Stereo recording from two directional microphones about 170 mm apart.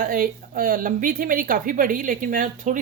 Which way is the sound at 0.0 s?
55° right (ahead or behind).